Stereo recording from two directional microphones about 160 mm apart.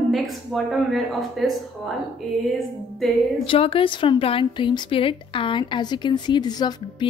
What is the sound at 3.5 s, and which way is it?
Speech, 35° left (ahead or behind).